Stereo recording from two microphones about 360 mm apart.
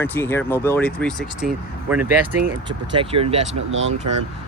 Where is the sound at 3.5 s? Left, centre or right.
Right.